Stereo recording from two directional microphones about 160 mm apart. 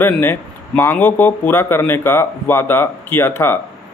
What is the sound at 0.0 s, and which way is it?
Speech, 15° left (ahead or behind).